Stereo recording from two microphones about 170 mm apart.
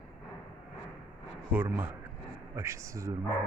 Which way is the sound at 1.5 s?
10° right (ahead or behind).